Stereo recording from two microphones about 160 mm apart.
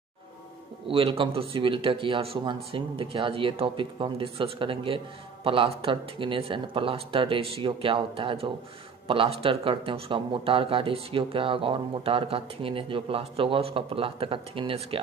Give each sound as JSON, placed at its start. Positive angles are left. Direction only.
{"t": 0.8, "sound": "speech", "side_deg": -35}